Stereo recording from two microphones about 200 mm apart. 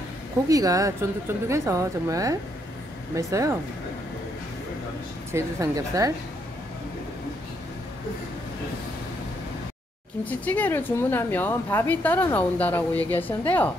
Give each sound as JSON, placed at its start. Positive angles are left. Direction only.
{"t": 0.5, "sound": "speech", "side_deg": -15}
{"t": 5.3, "sound": "speech", "side_deg": -15}
{"t": 10.2, "sound": "speech", "side_deg": 5}